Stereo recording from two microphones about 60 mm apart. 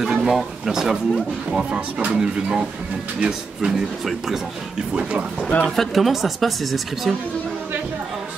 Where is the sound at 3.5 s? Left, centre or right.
Centre.